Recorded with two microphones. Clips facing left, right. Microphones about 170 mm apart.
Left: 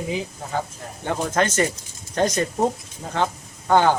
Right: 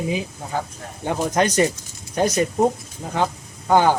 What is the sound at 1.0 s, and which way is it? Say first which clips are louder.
Speech: right 2 dB; 15° right (ahead or behind).